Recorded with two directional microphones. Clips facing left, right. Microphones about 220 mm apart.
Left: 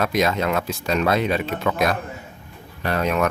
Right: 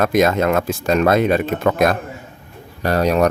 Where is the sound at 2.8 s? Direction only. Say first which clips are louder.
Right 6 dB; 40° right (ahead or behind).